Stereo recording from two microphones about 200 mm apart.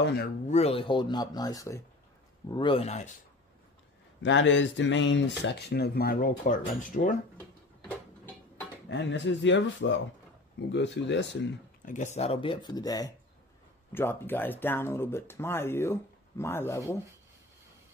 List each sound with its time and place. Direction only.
0.0 s speech: 55° left (ahead or behind)
0.5 s speech: 30° left (ahead or behind)
4.2 s speech: 65° left (ahead or behind); by 7.2 s 40° left (ahead or behind)
8.9 s speech: 60° left (ahead or behind)
11.8 s speech: 40° left (ahead or behind); by 16.9 s 15° left (ahead or behind)